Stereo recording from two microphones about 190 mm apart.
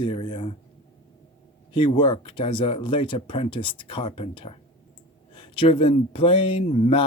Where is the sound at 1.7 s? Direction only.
25° left (ahead or behind).